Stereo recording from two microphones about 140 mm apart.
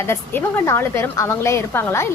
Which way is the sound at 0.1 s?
15° left (ahead or behind).